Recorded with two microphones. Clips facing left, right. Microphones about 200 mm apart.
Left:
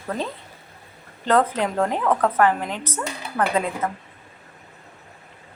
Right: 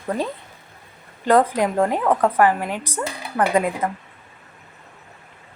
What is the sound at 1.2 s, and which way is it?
A woman's voice, 10° right (ahead or behind).